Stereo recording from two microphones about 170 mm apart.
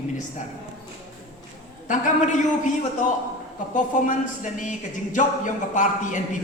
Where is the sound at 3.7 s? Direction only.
50° left (ahead or behind).